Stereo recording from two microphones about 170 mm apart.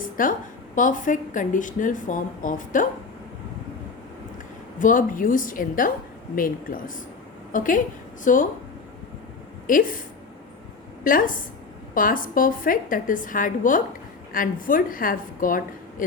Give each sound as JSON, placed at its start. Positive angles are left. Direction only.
{"t": 0.0, "sound": "a sound", "side_deg": 55}
{"t": 0.8, "sound": "a woman's voice", "side_deg": 50}
{"t": 4.8, "sound": "a woman's voice", "side_deg": 50}
{"t": 9.6, "sound": "a woman's voice", "side_deg": 55}
{"t": 11.0, "sound": "a woman's voice", "side_deg": 55}